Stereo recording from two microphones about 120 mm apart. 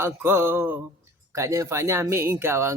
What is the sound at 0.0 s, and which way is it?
Music, 20° right (ahead or behind).